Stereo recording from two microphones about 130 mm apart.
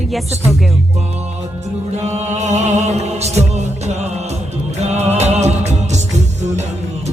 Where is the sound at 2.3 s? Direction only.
60° right (ahead or behind).